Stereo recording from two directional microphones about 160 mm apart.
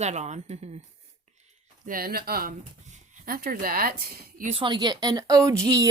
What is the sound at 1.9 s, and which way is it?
A woman's voice, 65° right (ahead or behind).